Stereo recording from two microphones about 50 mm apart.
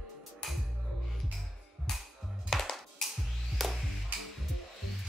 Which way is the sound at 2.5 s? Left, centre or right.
Centre.